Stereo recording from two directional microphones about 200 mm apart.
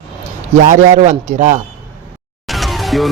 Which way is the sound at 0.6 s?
40° right (ahead or behind).